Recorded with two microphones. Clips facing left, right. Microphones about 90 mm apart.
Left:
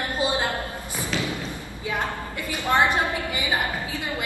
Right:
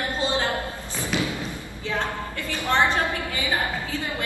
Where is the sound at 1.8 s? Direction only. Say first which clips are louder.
Even; 15° left (ahead or behind).